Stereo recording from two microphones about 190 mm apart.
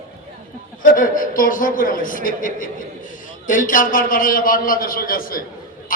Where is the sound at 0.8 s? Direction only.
45° left (ahead or behind).